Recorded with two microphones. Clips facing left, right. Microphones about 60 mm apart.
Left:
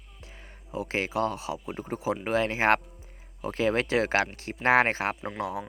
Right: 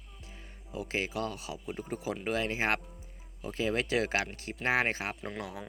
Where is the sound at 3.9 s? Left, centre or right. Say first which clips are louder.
Left 5 dB; left.